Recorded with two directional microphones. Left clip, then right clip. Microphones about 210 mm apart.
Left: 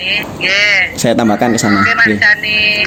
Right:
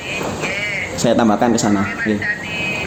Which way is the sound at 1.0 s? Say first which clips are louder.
Left 3 dB; 50° left (ahead or behind).